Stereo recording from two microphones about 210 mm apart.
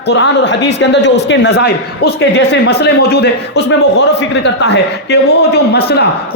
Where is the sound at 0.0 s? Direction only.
55° left (ahead or behind).